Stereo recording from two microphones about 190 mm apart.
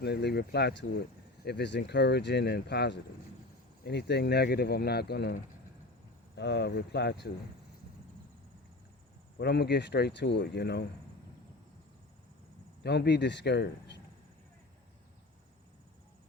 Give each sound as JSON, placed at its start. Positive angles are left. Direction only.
{"t": 0.0, "sound": "speech", "side_deg": 60}
{"t": 9.4, "sound": "speech", "side_deg": 60}
{"t": 12.8, "sound": "speech", "side_deg": 65}